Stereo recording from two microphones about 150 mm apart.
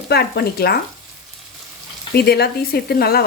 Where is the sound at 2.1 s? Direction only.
90° left.